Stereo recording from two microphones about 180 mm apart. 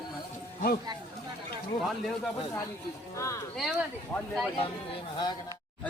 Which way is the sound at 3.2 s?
15° left (ahead or behind).